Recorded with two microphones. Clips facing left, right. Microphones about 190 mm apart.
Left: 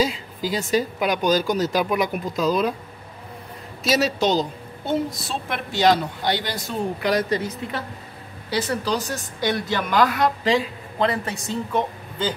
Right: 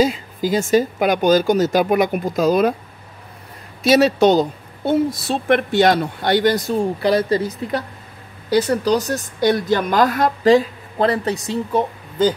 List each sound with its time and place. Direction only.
0.0 s a woman's voice: 50° right (ahead or behind)
3.8 s speech: 55° right (ahead or behind)
7.0 s a woman's voice: 30° right (ahead or behind)